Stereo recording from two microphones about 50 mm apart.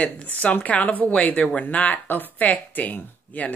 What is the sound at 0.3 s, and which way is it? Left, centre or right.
Speech, left.